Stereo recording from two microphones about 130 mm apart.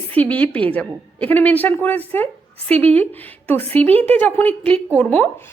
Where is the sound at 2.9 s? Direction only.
15° left (ahead or behind).